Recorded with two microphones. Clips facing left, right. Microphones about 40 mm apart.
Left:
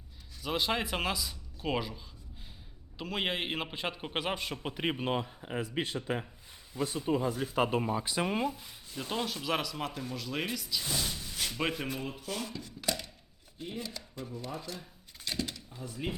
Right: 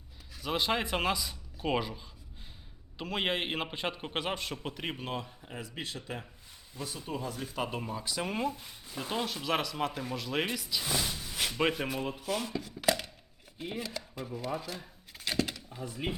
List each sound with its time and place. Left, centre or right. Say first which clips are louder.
0.4 s a man's voice: right 1 dB; centre
4.7 s speech: left 9 dB; centre
6.8 s speech: left 7 dB; centre
7.5 s speech: left 6 dB; left
8.3 s a man's voice: right 1 dB; centre
8.5 s a man's voice: right 1 dB; centre
15.7 s drawer open or close: right 3 dB; centre